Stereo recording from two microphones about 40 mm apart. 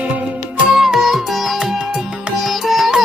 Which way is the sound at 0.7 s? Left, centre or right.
Centre.